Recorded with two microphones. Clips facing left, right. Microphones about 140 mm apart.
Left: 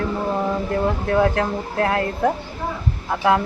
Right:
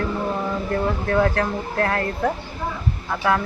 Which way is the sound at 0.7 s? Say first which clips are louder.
Even; 15° left (ahead or behind).